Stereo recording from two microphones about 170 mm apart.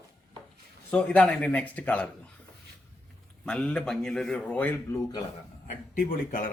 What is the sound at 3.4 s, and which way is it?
A man's voice, 5° left (ahead or behind).